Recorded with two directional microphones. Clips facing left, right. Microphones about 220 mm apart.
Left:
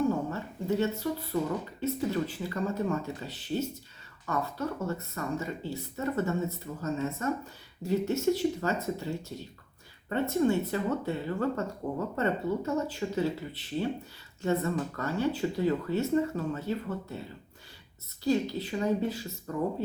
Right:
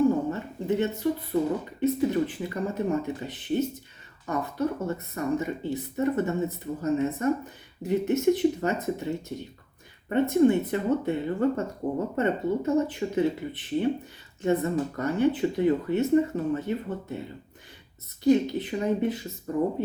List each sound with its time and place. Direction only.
0.3 s speech: 20° right (ahead or behind)